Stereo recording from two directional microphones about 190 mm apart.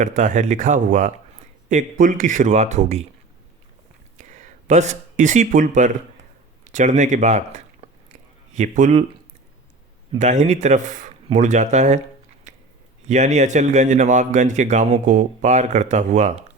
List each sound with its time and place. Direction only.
0.0 s speech: 40° right (ahead or behind)
4.2 s speech: 40° right (ahead or behind)
7.8 s a sound: 35° right (ahead or behind)
8.5 s speech: 40° right (ahead or behind)
10.2 s speech: 35° right (ahead or behind)
12.5 s a sound: 40° right (ahead or behind)
13.1 s speech: 35° right (ahead or behind)